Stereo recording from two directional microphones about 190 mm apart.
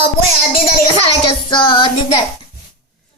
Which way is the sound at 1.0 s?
30° left (ahead or behind).